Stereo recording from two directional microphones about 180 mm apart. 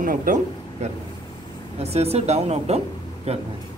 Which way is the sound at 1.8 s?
35° right (ahead or behind).